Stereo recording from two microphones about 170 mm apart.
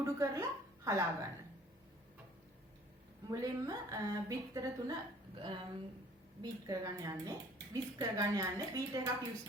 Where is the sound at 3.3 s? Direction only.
20° right (ahead or behind).